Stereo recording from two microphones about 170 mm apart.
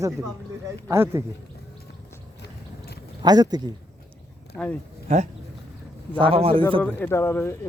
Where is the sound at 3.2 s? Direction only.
25° right (ahead or behind).